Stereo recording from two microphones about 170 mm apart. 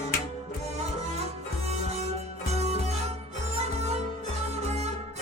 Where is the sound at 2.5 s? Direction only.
40° right (ahead or behind).